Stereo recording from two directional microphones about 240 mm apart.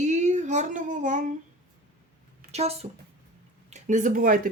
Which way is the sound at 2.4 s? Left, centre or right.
Right.